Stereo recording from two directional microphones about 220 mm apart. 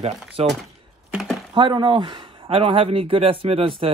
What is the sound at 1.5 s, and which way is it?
Speech, 20° right (ahead or behind).